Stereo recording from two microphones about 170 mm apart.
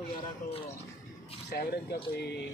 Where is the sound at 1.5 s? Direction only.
65° left (ahead or behind).